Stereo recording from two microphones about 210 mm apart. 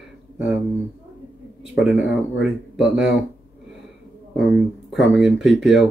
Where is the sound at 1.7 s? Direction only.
5° right (ahead or behind).